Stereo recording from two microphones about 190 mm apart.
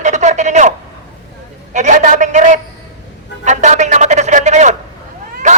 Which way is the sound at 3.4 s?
40° right (ahead or behind).